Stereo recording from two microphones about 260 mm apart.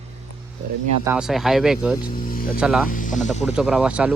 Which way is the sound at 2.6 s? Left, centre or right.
Centre.